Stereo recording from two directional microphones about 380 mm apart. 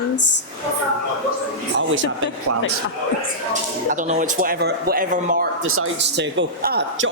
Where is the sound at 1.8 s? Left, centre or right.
Right.